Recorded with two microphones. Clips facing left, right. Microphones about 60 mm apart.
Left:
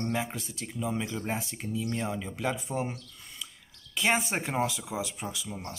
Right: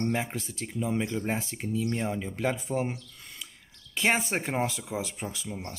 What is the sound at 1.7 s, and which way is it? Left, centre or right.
Speech, right.